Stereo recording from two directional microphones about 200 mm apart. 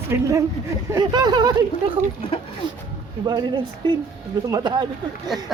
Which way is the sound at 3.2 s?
20° right (ahead or behind).